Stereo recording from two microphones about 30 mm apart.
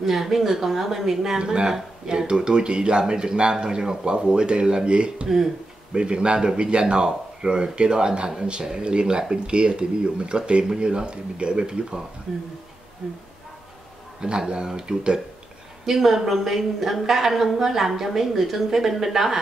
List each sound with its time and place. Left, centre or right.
0.0 s a woman's voice: centre
1.4 s speech: right
14.2 s speech: right
15.8 s a woman's voice: centre